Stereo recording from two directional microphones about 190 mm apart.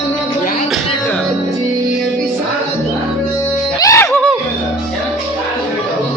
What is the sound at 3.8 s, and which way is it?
Music, 15° left (ahead or behind).